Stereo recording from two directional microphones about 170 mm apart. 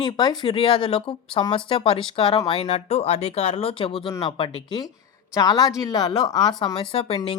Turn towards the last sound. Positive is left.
turn(degrees=35)  # may be behind; listen again after turning